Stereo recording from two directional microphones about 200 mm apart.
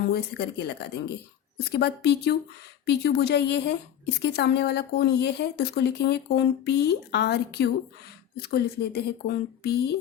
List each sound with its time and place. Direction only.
0.1 s speech: 55° left (ahead or behind)